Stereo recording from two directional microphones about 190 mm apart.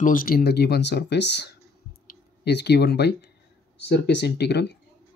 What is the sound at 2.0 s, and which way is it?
Clicking, 60° left (ahead or behind).